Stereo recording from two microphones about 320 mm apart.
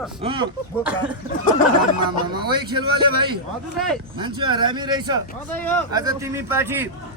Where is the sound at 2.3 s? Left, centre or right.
Centre.